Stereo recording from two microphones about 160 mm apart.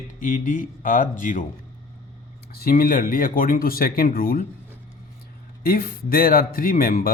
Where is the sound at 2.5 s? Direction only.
70° left (ahead or behind).